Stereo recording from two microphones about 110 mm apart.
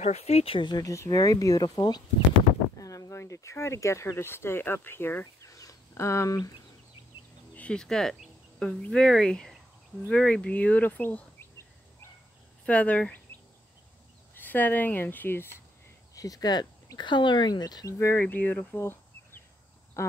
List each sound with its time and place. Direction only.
0.0 s speech: 75° left (ahead or behind)
0.6 s speech: 40° left (ahead or behind)
0.9 s speech: 30° left (ahead or behind)
5.2 s a sound: 30° left (ahead or behind)
7.5 s cricket: 10° left (ahead or behind)
8.6 s speech: 10° left (ahead or behind)
10.1 s a sound: 10° left (ahead or behind)
12.6 s speech: 10° left (ahead or behind)
14.3 s speech: 15° left (ahead or behind)
16.2 s speech: 35° left (ahead or behind)
17.9 s speech: 20° left (ahead or behind)
20.0 s speech: 25° left (ahead or behind)